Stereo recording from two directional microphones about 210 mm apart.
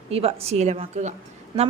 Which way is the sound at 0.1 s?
30° right (ahead or behind).